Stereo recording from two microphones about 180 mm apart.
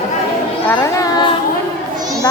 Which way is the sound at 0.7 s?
20° left (ahead or behind).